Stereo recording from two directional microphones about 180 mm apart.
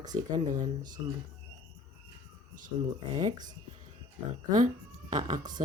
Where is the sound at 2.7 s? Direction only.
30° right (ahead or behind).